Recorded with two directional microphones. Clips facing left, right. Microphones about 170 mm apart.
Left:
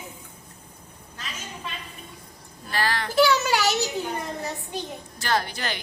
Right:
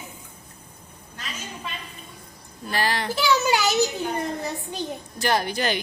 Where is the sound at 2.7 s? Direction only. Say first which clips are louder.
Right 1 dB; 20° right (ahead or behind).